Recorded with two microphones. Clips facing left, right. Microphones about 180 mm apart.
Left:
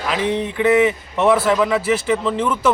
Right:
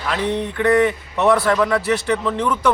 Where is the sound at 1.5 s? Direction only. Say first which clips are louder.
Left 1 dB; 5° left (ahead or behind).